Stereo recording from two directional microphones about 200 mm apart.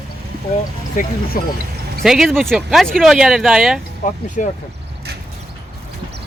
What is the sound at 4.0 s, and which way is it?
Speech, 40° left (ahead or behind).